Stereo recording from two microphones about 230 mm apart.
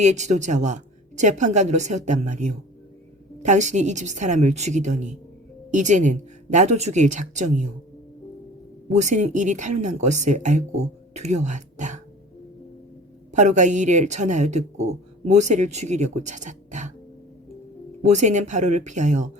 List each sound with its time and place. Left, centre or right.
0.0 s speech: right
8.9 s speech: right
13.3 s speech: right
18.0 s speech: right